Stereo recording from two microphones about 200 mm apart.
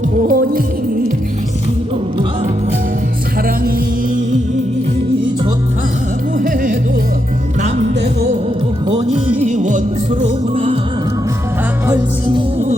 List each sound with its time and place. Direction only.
0.2 s music: 45° right (ahead or behind)
6.4 s music: 45° right (ahead or behind)
8.9 s music: 35° right (ahead or behind)